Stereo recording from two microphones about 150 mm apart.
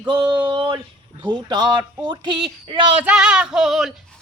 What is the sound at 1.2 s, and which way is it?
Speech, 30° right (ahead or behind).